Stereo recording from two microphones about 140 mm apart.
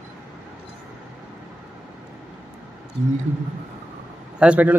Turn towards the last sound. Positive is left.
turn(degrees=-10)  # may be behind; listen again after turning